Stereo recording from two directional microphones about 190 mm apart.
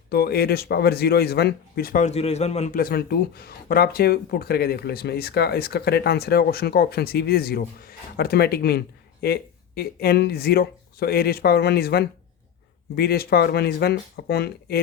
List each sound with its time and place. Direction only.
0.1 s speech: 55° left (ahead or behind); by 2.7 s 35° left (ahead or behind)
2.7 s speech: 55° left (ahead or behind)